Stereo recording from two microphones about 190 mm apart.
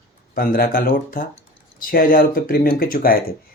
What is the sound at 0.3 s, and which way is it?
Speech, 50° left (ahead or behind).